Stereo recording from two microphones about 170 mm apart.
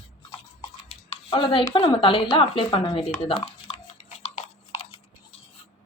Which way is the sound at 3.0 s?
30° left (ahead or behind).